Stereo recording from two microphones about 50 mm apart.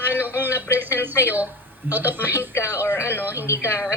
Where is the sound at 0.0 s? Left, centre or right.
Right.